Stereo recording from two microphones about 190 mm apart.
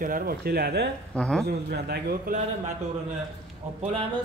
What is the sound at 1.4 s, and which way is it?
Speech, 55° right (ahead or behind).